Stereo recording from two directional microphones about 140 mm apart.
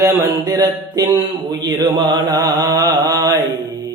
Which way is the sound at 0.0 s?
25° right (ahead or behind).